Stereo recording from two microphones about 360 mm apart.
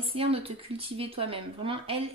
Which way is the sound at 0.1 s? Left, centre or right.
Centre.